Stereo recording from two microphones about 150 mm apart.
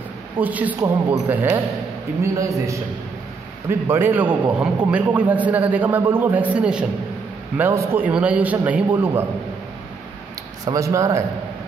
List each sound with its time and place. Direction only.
0.4 s a man's voice: 10° right (ahead or behind)
10.6 s speech: 20° right (ahead or behind)